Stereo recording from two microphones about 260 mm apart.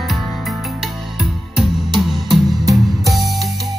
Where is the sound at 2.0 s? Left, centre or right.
Centre.